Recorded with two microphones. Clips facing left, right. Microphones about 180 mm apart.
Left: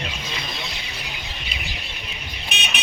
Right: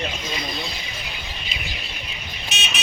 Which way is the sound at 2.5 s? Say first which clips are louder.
Even; 60° left (ahead or behind).